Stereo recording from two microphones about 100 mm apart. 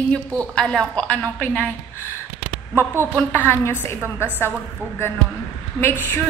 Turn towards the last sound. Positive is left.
turn(degrees=20)  # may be behind; listen again after turning